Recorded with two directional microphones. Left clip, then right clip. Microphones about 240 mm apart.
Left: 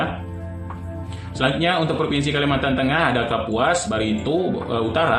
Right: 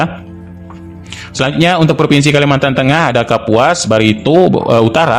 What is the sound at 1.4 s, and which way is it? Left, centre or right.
A man's voice, right.